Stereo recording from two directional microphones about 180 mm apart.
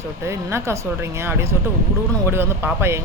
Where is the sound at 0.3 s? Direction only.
15° right (ahead or behind).